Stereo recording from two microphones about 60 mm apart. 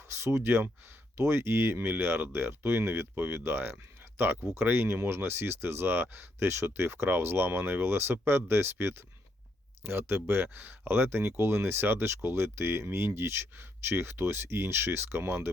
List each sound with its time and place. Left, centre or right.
0.1 s speech: right